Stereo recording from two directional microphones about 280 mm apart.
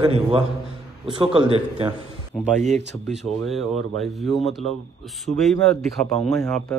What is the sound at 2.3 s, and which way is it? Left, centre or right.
Speech, centre.